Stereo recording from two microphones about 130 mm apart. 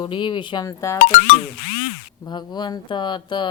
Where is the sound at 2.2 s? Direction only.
35° left (ahead or behind).